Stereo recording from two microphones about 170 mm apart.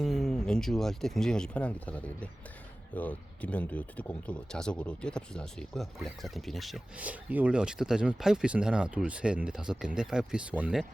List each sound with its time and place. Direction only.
0.0 s speech: centre (ahead or behind)